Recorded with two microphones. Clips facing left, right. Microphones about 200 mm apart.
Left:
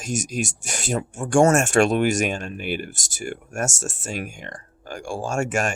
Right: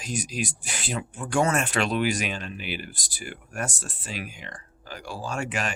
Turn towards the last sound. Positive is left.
turn(degrees=45)  # may be behind; listen again after turning